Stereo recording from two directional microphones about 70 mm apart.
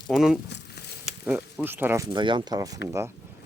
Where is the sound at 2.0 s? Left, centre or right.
Right.